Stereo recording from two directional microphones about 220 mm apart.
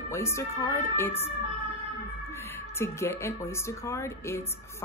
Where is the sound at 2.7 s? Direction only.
10° left (ahead or behind).